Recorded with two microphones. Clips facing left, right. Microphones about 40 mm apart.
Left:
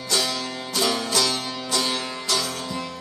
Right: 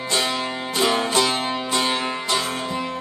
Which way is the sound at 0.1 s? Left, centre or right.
Right.